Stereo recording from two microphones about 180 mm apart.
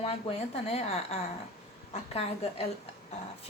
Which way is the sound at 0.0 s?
35° left (ahead or behind).